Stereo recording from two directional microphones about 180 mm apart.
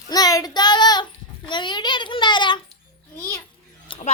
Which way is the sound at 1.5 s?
25° left (ahead or behind).